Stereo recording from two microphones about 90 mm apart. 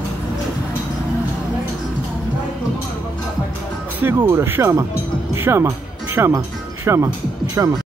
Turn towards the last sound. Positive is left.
turn(degrees=-35)  # may be behind; listen again after turning